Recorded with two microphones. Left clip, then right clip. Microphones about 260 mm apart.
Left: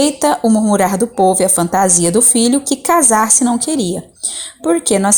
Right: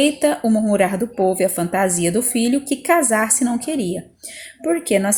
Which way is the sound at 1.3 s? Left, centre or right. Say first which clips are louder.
Left 5 dB; left.